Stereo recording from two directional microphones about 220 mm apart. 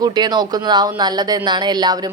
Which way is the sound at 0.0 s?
20° right (ahead or behind).